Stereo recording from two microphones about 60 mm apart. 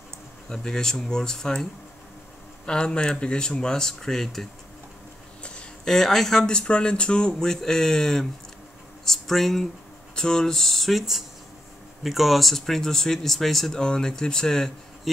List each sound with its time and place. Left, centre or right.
0.5 s speech: centre
5.4 s a sound: centre
5.9 s speech: centre